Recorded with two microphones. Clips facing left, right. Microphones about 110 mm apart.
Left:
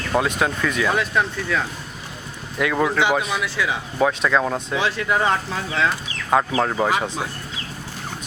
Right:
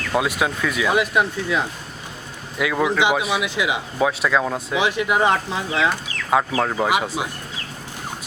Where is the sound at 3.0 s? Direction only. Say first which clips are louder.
Right 1 dB; 15° right (ahead or behind).